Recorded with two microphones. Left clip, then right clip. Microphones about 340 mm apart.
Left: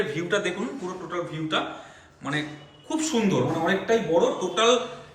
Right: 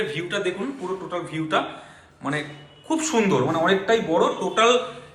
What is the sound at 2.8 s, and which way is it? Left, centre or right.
A woman's voice, centre.